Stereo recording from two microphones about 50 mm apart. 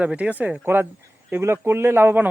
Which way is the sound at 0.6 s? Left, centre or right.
Right.